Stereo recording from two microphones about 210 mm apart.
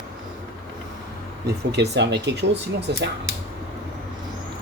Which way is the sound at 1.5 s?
50° right (ahead or behind).